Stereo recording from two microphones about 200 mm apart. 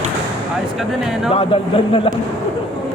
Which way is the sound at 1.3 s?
25° left (ahead or behind).